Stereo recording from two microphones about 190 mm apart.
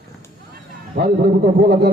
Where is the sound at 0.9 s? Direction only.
55° right (ahead or behind).